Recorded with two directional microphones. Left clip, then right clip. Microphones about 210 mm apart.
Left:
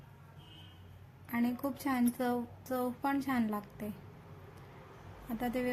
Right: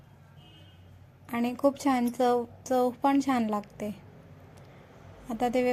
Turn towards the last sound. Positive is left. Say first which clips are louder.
# right 9 dB
turn(degrees=-30)  # may be behind; listen again after turning